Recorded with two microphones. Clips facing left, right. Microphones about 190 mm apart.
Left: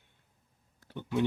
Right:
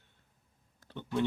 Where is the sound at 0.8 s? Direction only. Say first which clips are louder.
Left 2 dB; 15° left (ahead or behind).